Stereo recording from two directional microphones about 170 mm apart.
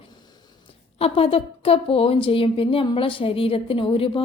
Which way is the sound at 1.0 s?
35° left (ahead or behind).